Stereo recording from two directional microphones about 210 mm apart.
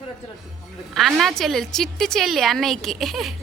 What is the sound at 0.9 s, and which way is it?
A woman's voice, centre (ahead or behind).